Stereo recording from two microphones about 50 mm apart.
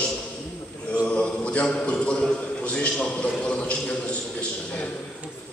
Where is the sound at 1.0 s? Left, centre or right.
Centre.